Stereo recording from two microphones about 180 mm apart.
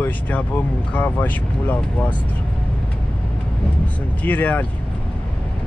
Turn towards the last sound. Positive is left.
turn(degrees=10)  # may be behind; listen again after turning